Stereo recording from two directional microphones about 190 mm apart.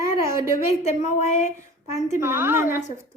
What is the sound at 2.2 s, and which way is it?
Speech, 10° right (ahead or behind).